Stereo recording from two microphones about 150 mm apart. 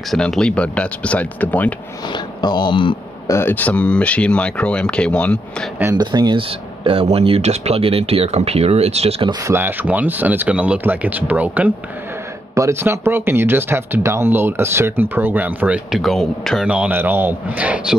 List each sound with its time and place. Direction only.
0.1 s speech: 5° left (ahead or behind)
2.1 s speech: 30° left (ahead or behind)
3.3 s speech: 15° left (ahead or behind)
5.9 s speech: 30° right (ahead or behind)
9.3 s speech: 20° right (ahead or behind)